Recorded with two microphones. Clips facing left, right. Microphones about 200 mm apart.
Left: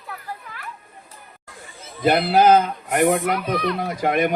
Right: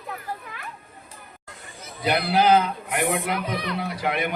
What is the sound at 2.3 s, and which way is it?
Speech, 45° left (ahead or behind).